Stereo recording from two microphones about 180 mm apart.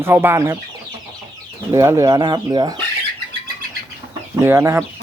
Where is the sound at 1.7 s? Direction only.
15° right (ahead or behind).